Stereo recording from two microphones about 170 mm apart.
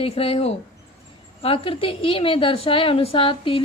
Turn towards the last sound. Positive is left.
turn(degrees=30)  # may be behind; listen again after turning